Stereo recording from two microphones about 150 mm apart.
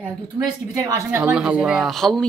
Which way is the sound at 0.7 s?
20° right (ahead or behind).